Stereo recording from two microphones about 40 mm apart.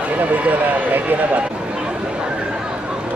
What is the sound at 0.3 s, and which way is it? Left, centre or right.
Speech, right.